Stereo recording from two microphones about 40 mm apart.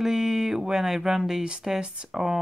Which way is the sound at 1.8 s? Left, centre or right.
Right.